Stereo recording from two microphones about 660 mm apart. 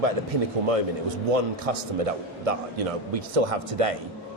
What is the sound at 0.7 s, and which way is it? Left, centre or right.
A man's voice, right.